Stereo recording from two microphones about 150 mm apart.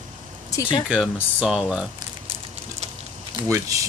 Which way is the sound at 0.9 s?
5° right (ahead or behind).